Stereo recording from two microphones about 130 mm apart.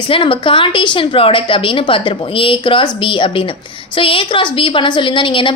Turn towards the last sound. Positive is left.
turn(degrees=40)  # may be behind; listen again after turning